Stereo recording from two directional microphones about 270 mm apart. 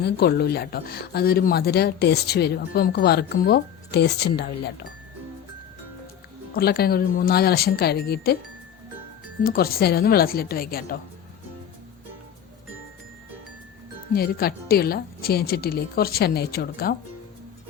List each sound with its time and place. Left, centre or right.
0.0 s speech: left
6.5 s speech: left
9.4 s speech: left
14.1 s speech: left